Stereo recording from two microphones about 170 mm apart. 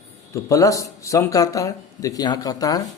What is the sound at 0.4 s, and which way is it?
A man's voice, 20° left (ahead or behind).